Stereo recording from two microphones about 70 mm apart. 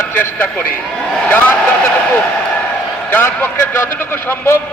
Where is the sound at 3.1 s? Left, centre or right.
Left.